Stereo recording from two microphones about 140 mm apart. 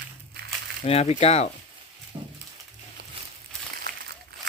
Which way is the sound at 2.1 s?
35° right (ahead or behind).